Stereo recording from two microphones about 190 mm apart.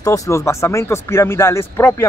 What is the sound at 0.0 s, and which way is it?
Speech, 15° left (ahead or behind).